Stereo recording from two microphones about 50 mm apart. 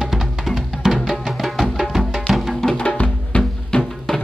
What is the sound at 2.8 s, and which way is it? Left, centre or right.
Music, left.